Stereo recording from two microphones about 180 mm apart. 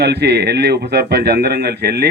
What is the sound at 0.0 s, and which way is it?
Speech, 65° right (ahead or behind).